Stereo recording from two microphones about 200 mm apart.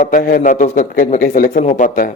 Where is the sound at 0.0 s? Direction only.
45° left (ahead or behind).